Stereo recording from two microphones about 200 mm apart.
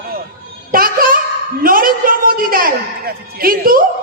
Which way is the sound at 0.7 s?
45° right (ahead or behind).